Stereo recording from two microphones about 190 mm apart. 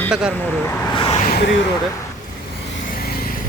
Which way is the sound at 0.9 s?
30° left (ahead or behind).